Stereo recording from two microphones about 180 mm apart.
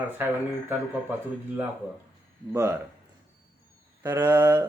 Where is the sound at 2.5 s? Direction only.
15° right (ahead or behind).